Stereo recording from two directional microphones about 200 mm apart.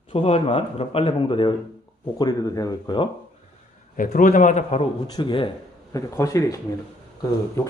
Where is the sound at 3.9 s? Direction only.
40° left (ahead or behind).